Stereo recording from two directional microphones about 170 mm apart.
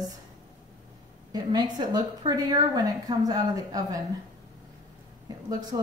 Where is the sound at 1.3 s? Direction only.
25° right (ahead or behind).